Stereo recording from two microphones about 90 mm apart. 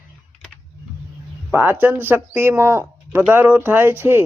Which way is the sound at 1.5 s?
25° right (ahead or behind).